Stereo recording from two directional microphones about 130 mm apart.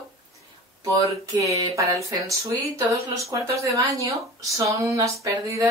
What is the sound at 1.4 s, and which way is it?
Speech, 25° right (ahead or behind).